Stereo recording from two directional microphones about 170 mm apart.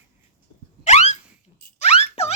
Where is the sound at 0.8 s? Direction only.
40° left (ahead or behind).